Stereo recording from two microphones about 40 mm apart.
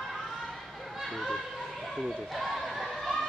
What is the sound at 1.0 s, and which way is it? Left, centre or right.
Children playing, centre.